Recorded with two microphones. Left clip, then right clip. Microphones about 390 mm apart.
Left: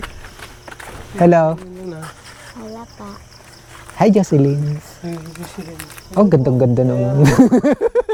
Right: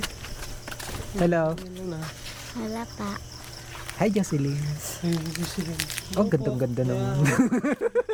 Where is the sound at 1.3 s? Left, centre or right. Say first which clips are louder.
Left 12 dB; left.